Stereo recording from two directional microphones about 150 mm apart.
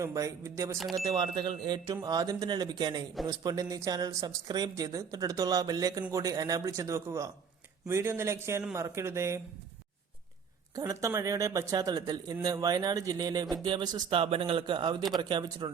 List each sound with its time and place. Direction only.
0.0 s speech: 20° right (ahead or behind)
0.8 s speech: centre (ahead or behind)
1.0 s speech: 30° right (ahead or behind)
10.8 s speech: 25° right (ahead or behind)